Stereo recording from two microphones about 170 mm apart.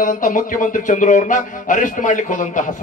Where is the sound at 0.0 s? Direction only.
50° left (ahead or behind).